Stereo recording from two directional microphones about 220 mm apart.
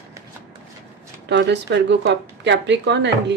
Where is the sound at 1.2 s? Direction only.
50° right (ahead or behind).